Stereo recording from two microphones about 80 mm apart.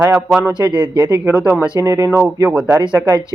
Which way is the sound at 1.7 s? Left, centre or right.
Right.